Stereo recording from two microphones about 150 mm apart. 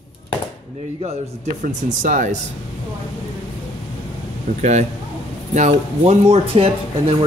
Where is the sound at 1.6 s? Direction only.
60° right (ahead or behind).